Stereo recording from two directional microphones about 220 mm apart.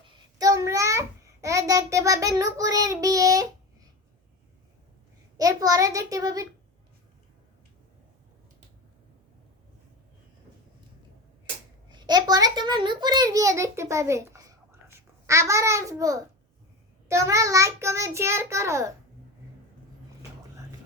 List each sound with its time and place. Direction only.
0.3 s a sound: 15° right (ahead or behind)
5.4 s a child's voice: 15° right (ahead or behind)
11.9 s a child's voice: 20° right (ahead or behind)